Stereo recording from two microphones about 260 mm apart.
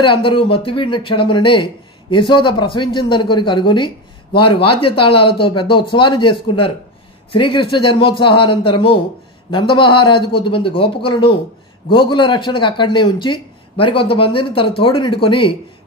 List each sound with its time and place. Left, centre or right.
0.0 s speech: centre